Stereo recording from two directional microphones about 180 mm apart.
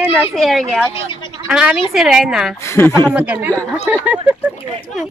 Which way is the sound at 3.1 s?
10° right (ahead or behind).